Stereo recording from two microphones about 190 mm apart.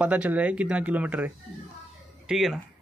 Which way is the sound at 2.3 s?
Centre (ahead or behind).